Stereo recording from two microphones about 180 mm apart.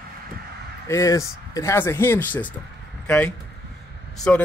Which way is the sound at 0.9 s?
15° left (ahead or behind).